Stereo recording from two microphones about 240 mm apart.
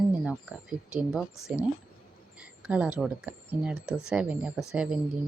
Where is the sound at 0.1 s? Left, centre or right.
Centre.